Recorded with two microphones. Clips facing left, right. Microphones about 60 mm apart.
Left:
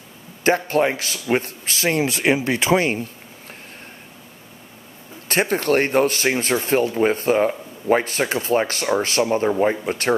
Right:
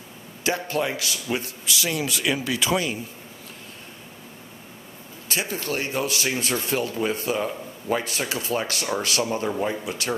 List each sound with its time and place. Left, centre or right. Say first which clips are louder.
0.4 s speech: left 7 dB; left
5.3 s speech: left 9 dB; left